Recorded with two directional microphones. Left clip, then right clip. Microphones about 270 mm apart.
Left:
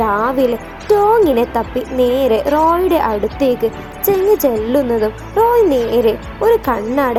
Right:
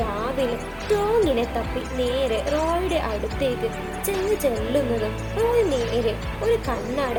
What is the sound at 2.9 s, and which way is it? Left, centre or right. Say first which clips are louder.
Speech: left 10 dB; left.